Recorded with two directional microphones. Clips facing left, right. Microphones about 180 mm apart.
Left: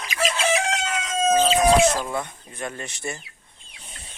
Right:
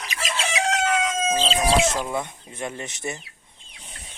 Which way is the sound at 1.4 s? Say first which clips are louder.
Left 4 dB; 25° right (ahead or behind).